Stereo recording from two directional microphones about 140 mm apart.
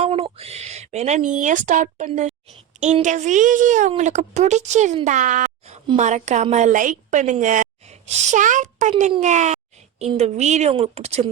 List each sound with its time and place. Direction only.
0.0 s a woman's voice: 45° right (ahead or behind)